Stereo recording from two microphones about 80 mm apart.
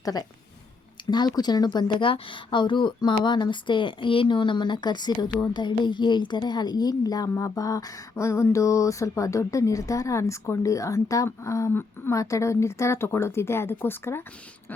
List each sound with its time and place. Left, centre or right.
0.0 s a woman's voice: left
5.4 s a woman's voice: left
8.1 s speech: left
12.1 s speech: left